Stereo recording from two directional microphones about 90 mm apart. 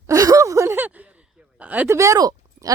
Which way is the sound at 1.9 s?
35° right (ahead or behind).